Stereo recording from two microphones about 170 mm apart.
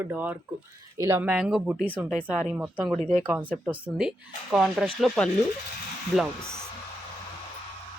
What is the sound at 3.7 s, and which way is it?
A woman's voice, 10° right (ahead or behind).